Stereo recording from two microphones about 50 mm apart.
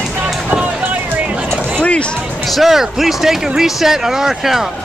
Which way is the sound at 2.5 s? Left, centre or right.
Centre.